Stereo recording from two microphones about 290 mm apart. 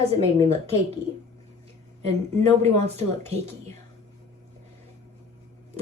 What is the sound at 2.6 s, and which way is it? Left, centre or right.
Speech, right.